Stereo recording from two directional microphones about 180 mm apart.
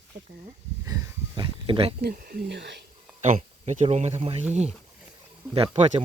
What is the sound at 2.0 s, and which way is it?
Speech, 55° right (ahead or behind).